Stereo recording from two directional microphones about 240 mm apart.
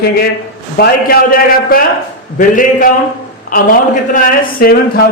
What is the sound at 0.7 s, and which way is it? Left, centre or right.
A man's voice, left.